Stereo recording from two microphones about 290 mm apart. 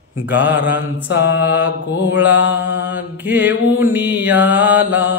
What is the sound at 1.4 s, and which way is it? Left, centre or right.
A man's voice, centre.